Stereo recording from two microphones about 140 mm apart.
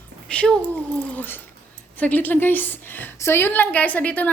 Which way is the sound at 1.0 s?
10° left (ahead or behind).